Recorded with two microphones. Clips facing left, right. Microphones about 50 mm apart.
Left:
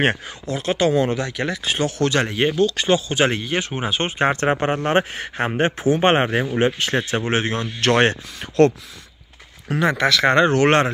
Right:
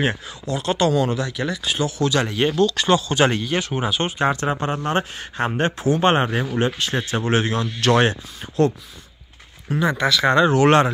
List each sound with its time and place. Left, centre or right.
0.0 s speech: left
0.7 s speech: centre
1.1 s speech: left
2.2 s speech: left
5.4 s speech: left
8.4 s speech: left